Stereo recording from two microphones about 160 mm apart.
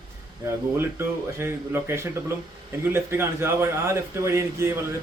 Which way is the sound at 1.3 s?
15° right (ahead or behind).